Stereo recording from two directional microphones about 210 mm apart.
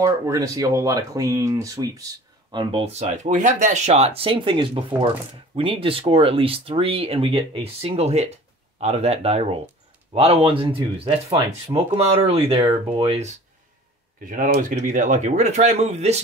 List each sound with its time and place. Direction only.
0.0 s speech: 15° right (ahead or behind)